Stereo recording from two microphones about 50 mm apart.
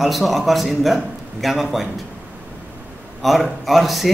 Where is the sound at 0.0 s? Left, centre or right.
Centre.